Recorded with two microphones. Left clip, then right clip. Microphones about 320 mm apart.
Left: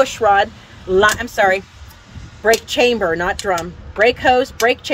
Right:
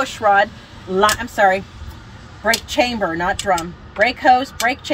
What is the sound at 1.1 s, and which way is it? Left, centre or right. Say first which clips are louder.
Speech: even; left.